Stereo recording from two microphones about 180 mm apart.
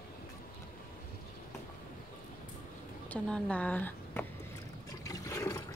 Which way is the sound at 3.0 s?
5° left (ahead or behind).